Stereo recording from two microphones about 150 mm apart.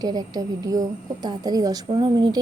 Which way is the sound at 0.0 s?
25° right (ahead or behind).